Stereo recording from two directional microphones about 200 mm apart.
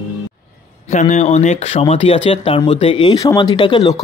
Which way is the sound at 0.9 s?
35° left (ahead or behind).